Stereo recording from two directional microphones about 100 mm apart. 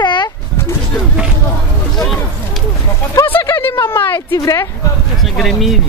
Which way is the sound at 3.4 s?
25° left (ahead or behind).